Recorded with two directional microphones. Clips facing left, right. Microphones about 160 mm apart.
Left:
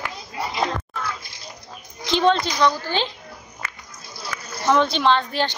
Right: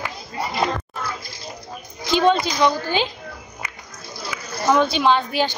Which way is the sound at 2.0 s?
5° right (ahead or behind).